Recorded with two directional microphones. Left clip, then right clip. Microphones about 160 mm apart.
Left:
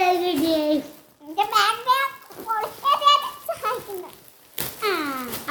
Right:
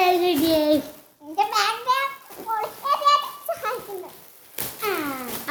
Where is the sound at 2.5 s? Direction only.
30° left (ahead or behind).